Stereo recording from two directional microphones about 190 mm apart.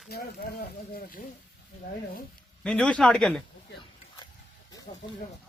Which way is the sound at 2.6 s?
5° left (ahead or behind).